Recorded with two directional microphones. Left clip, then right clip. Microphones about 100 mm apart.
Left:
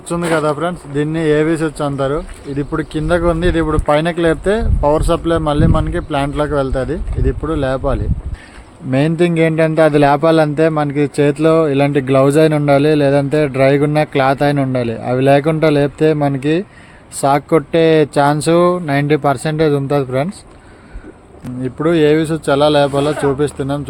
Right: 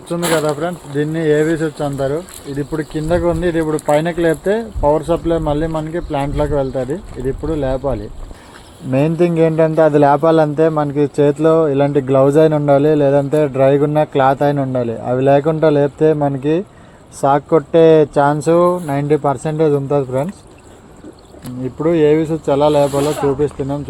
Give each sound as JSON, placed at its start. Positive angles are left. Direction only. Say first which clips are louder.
{"t": 0.1, "sound": "speech", "louder": "left 1 dB", "side_deg": 40}
{"t": 16.1, "sound": "speech", "louder": "left 1 dB", "side_deg": 55}
{"t": 21.6, "sound": "speech", "louder": "left 1 dB", "side_deg": 35}